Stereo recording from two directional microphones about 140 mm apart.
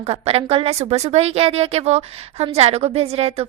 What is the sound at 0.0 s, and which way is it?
A woman's voice, 45° right (ahead or behind).